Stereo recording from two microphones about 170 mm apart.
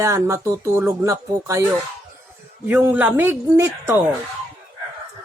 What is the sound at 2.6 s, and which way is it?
Speech, 10° right (ahead or behind).